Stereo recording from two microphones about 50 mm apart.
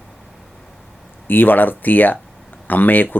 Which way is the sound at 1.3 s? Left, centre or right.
Left.